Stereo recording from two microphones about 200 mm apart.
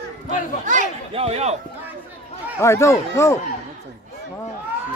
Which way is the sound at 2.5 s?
15° left (ahead or behind).